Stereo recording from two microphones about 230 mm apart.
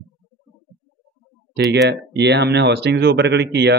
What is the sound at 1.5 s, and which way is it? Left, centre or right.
Speech, right.